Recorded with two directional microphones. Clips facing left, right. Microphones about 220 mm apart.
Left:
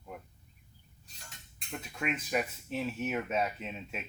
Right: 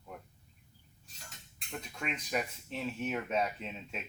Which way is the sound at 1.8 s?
5° left (ahead or behind).